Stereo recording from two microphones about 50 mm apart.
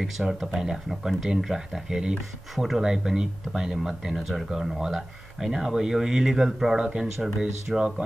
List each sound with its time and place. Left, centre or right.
0.0 s speech: centre
4.2 s speech: centre
7.3 s speech: centre